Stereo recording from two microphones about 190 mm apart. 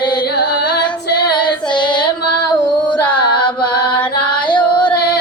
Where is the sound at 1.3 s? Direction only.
25° left (ahead or behind).